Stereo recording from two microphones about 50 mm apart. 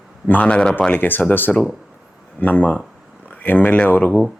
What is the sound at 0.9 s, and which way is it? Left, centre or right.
Speech, left.